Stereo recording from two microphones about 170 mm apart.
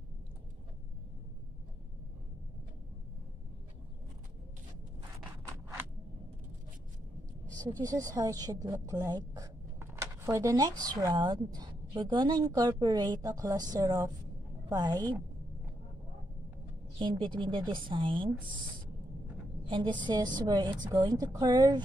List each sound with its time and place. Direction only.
7.5 s a woman's voice: 20° right (ahead or behind)
17.0 s a woman's voice: 30° right (ahead or behind)
19.7 s a woman's voice: 25° right (ahead or behind)